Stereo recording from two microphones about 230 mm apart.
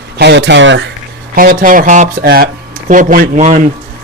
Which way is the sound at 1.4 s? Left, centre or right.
Right.